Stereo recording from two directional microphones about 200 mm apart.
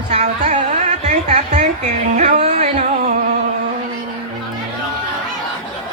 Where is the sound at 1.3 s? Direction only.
35° right (ahead or behind).